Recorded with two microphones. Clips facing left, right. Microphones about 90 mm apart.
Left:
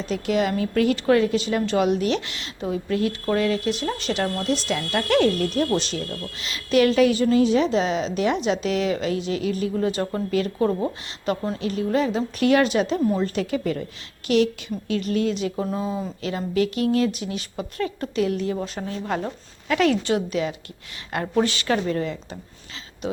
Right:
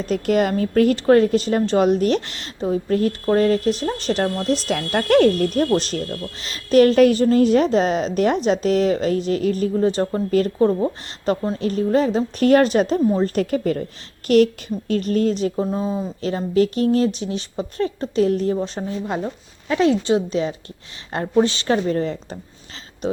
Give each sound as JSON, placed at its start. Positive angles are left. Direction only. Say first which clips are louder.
{"t": 0.0, "sound": "a woman's voice", "louder": "right 4 dB", "side_deg": -45}
{"t": 11.3, "sound": "a woman's voice", "louder": "right 4 dB", "side_deg": -35}
{"t": 15.5, "sound": "speech", "louder": "right 4 dB", "side_deg": -20}
{"t": 16.2, "sound": "a woman's voice", "louder": "right 5 dB", "side_deg": -35}